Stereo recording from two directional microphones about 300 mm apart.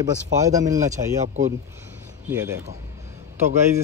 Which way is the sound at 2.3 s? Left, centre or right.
Centre.